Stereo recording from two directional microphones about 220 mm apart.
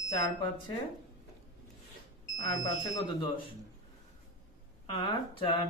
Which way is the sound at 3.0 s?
20° left (ahead or behind).